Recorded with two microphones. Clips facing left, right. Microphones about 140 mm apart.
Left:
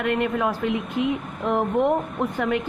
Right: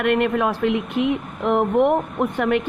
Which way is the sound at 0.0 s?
65° right (ahead or behind).